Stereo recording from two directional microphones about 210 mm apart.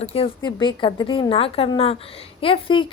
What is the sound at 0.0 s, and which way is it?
A woman's voice, 25° left (ahead or behind).